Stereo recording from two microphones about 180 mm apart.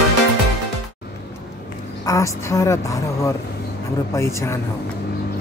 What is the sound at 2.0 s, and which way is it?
Speech, 20° left (ahead or behind).